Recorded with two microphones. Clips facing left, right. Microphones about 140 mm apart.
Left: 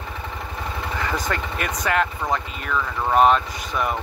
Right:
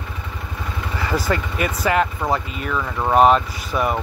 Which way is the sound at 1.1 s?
5° right (ahead or behind).